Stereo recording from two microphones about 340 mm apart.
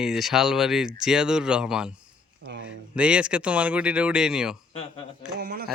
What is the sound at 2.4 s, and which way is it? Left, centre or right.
Speech, right.